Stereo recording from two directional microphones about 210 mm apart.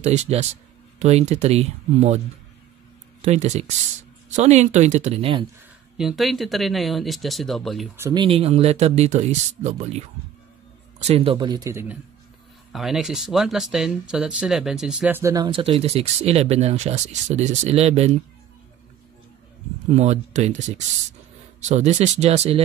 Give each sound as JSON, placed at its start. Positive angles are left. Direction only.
{"t": 0.0, "sound": "speech", "side_deg": -30}
{"t": 3.3, "sound": "speech", "side_deg": -35}
{"t": 5.9, "sound": "speech", "side_deg": 0}
{"t": 8.0, "sound": "speech", "side_deg": -20}
{"t": 19.9, "sound": "speech", "side_deg": -30}